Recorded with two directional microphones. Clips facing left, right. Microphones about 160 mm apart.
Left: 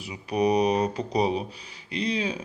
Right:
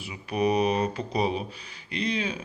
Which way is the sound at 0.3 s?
35° left (ahead or behind).